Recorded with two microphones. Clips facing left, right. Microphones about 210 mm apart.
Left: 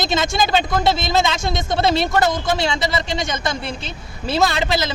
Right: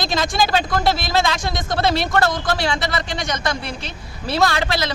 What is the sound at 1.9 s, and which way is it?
Speech, centre (ahead or behind).